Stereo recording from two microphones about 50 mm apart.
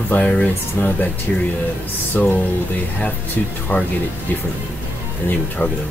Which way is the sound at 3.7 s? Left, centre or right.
Left.